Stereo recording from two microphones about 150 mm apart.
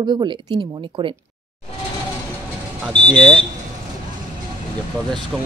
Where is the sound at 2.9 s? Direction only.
30° right (ahead or behind).